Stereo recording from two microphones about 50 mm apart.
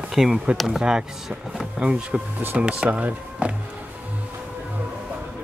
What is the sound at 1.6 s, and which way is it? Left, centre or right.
Bee, centre.